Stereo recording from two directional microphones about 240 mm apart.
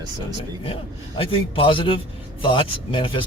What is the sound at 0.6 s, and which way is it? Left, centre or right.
Speech, left.